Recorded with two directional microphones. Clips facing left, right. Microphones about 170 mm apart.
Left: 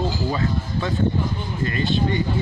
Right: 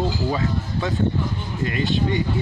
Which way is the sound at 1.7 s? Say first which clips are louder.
Even; 15° right (ahead or behind).